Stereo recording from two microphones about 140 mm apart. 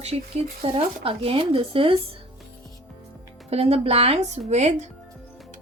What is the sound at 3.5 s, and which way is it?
A woman's voice, 45° right (ahead or behind).